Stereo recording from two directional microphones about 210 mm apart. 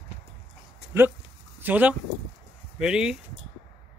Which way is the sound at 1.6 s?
5° right (ahead or behind).